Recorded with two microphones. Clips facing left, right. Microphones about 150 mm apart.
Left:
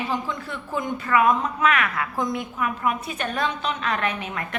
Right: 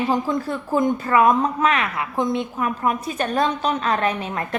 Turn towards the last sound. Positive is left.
turn(degrees=-35)  # may be behind; listen again after turning